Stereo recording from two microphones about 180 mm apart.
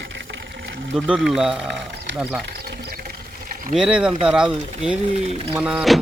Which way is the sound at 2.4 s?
65° right (ahead or behind).